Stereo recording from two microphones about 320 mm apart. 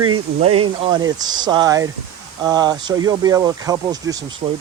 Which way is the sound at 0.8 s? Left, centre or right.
Centre.